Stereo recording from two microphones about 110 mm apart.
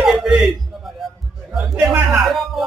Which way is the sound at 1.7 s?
15° right (ahead or behind).